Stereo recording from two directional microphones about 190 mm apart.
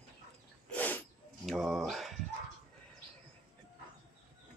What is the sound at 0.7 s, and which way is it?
Snort, 10° left (ahead or behind).